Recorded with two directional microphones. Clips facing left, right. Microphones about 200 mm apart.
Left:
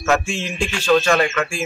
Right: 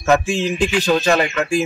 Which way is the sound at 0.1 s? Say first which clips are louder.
Right 4 dB; 35° right (ahead or behind).